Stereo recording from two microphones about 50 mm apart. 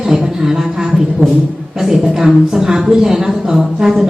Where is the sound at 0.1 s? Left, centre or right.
Centre.